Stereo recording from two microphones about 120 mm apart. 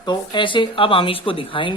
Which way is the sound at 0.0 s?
40° left (ahead or behind).